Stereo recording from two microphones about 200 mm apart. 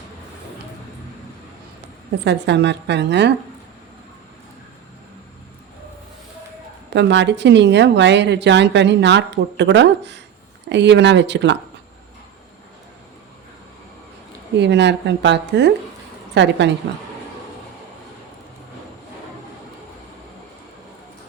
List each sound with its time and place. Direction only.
2.2 s a woman's voice: 60° right (ahead or behind)
6.9 s a woman's voice: 60° right (ahead or behind)
14.5 s a woman's voice: 60° right (ahead or behind)